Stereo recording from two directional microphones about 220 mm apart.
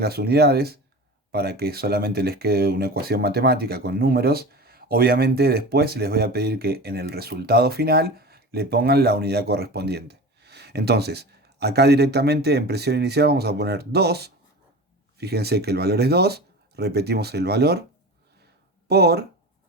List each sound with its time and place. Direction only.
0.0 s speech: 45° right (ahead or behind)
18.9 s speech: 45° right (ahead or behind)